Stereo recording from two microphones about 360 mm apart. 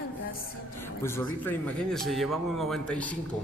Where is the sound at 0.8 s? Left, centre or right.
Centre.